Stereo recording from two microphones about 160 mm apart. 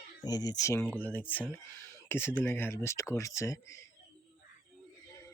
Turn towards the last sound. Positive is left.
turn(degrees=20)  # may be behind; listen again after turning